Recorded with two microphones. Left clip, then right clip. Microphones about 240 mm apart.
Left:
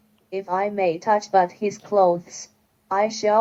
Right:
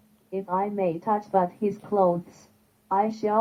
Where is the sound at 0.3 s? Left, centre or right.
Left.